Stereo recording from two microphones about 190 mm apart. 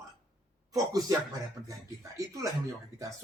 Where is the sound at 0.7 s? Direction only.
20° right (ahead or behind).